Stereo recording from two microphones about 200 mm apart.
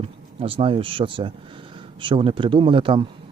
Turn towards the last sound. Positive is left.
turn(degrees=-25)  # may be behind; listen again after turning